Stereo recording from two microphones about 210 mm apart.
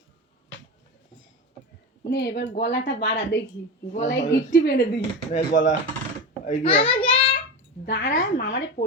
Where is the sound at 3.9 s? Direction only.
35° left (ahead or behind).